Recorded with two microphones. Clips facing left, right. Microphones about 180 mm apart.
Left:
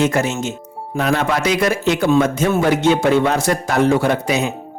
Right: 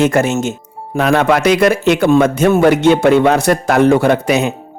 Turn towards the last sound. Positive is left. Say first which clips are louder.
# right 5 dB
turn(degrees=-65)  # may be behind; listen again after turning